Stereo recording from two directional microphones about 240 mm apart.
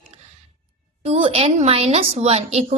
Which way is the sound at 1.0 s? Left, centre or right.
Right.